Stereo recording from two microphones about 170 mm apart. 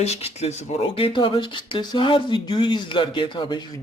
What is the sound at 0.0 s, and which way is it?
Speech, 40° left (ahead or behind).